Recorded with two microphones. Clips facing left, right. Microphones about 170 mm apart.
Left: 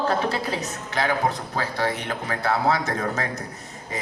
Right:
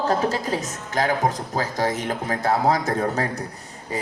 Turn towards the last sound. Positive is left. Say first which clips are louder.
# right 3 dB
turn(degrees=-35)  # may be behind; listen again after turning